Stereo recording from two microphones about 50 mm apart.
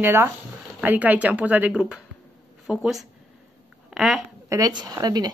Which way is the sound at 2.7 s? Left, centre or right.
Centre.